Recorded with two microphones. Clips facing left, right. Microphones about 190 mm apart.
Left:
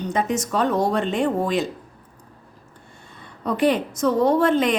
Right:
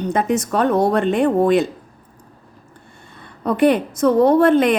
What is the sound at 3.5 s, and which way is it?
A woman's voice, 60° right (ahead or behind).